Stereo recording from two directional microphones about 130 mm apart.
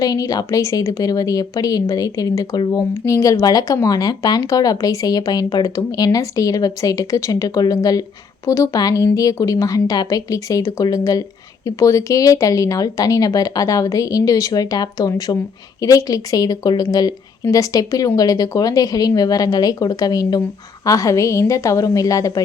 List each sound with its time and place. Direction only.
0.0 s a woman's voice: 30° left (ahead or behind)